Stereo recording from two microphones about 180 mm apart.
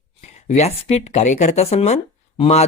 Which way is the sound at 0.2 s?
35° left (ahead or behind).